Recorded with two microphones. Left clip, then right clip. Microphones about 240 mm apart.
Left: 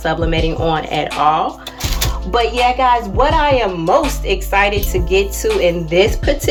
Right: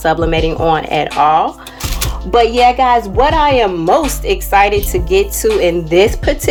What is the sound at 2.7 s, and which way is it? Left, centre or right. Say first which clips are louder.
A woman's voice: right 3 dB; right.